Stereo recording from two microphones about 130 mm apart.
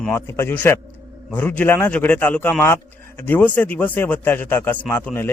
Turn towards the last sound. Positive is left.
turn(degrees=15)  # may be behind; listen again after turning